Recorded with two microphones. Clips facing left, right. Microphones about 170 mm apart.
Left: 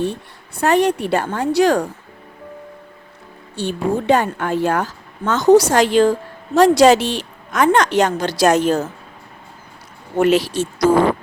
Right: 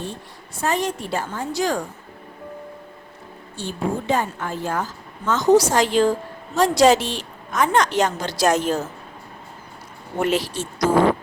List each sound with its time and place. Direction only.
0.0 s a woman's voice: 65° left (ahead or behind)
3.5 s a woman's voice: 70° left (ahead or behind)
10.2 s speech: 80° left